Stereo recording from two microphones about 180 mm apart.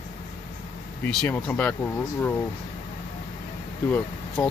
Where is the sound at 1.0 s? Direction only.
10° left (ahead or behind).